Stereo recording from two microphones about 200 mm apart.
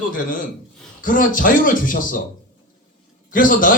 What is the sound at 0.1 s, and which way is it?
A man's voice, 45° left (ahead or behind).